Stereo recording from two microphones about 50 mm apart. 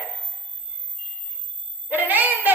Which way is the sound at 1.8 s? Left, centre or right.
Right.